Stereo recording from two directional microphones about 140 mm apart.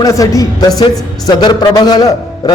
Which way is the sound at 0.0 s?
25° left (ahead or behind).